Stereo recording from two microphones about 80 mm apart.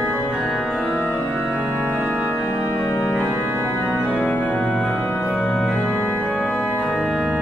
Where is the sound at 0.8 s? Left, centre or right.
Centre.